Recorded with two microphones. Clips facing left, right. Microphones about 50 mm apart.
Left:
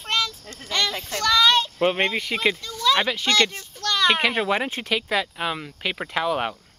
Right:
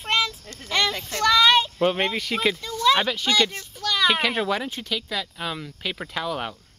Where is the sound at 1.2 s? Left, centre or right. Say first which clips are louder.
Right 1 dB; centre.